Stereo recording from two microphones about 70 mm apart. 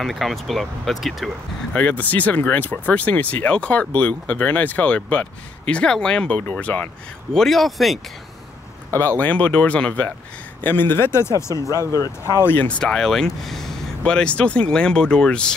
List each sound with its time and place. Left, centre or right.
0.0 s speech: centre
1.7 s speech: left
7.3 s speech: centre
8.9 s speech: left
10.6 s speech: left
12.4 s speech: left
12.9 s speech: centre